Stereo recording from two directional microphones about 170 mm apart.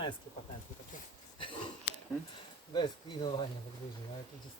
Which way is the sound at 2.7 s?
25° left (ahead or behind).